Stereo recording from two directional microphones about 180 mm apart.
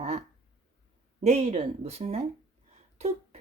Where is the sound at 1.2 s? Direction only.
40° right (ahead or behind).